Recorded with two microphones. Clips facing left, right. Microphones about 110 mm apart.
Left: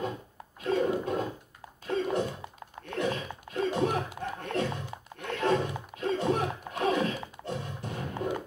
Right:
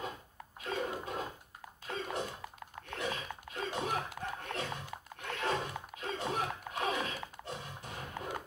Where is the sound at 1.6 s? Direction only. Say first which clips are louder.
Left 10 dB; 30° left (ahead or behind).